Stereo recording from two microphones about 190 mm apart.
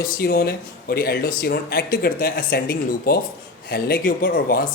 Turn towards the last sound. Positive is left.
turn(degrees=50)  # may be behind; listen again after turning